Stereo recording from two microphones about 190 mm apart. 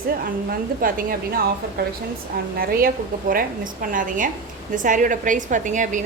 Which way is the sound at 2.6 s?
50° right (ahead or behind).